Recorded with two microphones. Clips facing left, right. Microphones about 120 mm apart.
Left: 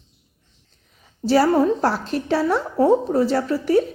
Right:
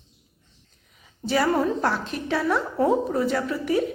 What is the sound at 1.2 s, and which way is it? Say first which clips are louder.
A woman's voice: left 6 dB; 30° left (ahead or behind).